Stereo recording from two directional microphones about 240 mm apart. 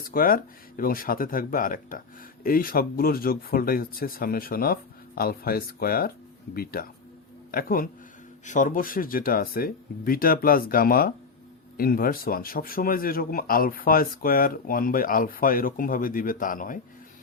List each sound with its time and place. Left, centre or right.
0.1 s speech: left